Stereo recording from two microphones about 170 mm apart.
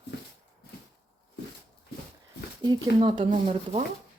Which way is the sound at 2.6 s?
30° right (ahead or behind).